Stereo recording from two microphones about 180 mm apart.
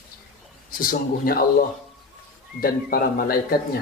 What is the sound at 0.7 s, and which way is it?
Speech, 50° left (ahead or behind).